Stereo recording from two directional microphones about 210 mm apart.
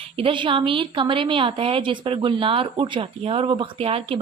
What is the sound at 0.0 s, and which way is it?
Speech, 25° right (ahead or behind).